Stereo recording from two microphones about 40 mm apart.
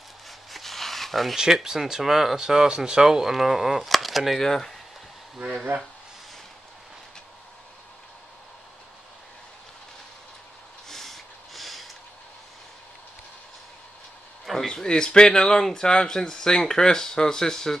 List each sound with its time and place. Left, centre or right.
0.5 s a sound: centre
1.3 s speech: centre
4.4 s speech: centre
10.9 s snort: centre
14.4 s a sound: centre
14.7 s speech: centre